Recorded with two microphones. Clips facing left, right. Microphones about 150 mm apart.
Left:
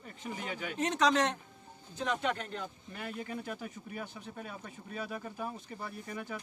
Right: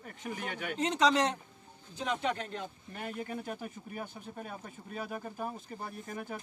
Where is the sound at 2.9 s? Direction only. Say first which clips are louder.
Right 2 dB; 40° right (ahead or behind).